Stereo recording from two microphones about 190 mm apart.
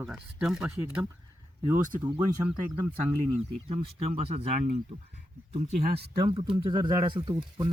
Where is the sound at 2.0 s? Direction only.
25° right (ahead or behind).